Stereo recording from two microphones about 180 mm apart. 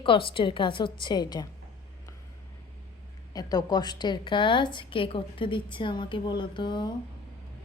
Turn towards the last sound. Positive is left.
turn(degrees=25)  # may be behind; listen again after turning